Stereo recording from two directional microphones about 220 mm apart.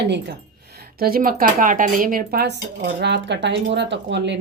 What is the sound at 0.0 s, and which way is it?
Speech, 50° right (ahead or behind).